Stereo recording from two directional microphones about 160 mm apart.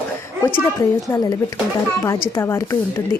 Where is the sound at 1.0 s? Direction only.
25° left (ahead or behind).